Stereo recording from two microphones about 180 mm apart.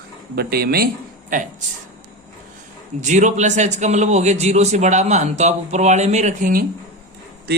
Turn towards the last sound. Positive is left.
turn(degrees=-50)  # may be behind; listen again after turning